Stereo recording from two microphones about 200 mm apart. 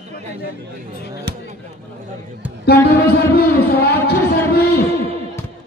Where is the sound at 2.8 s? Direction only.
50° left (ahead or behind).